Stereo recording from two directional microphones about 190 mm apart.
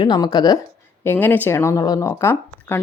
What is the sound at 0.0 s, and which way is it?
Speech, 20° left (ahead or behind).